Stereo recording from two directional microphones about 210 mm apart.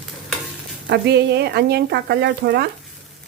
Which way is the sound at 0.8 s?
50° right (ahead or behind).